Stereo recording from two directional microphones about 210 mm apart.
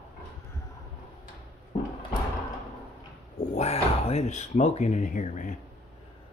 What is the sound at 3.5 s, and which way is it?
Speech, 30° left (ahead or behind).